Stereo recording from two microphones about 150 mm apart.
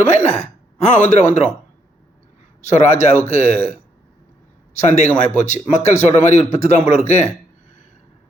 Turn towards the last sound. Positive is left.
turn(degrees=50)  # may be behind; listen again after turning